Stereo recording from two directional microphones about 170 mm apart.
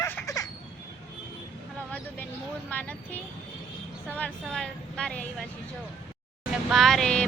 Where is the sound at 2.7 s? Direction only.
10° left (ahead or behind).